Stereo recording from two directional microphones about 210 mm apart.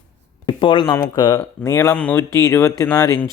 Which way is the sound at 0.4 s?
20° left (ahead or behind).